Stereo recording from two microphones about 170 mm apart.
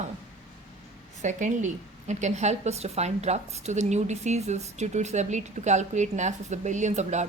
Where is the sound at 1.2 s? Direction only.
45° right (ahead or behind).